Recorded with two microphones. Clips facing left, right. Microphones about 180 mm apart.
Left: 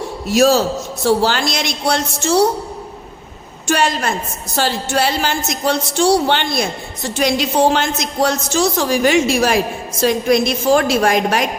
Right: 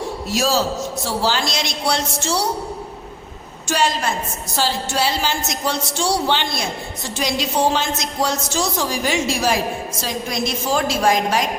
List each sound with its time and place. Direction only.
0.3 s a woman's voice: 55° left (ahead or behind)
3.7 s a woman's voice: 55° left (ahead or behind)